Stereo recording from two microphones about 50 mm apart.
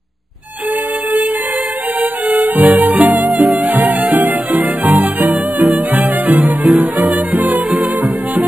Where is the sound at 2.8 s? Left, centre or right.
Right.